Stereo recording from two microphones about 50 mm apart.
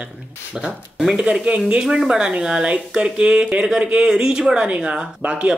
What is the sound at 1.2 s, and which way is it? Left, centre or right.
Speech, centre.